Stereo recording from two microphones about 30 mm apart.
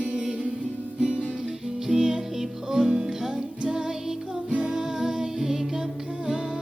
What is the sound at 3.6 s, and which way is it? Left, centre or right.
Music, right.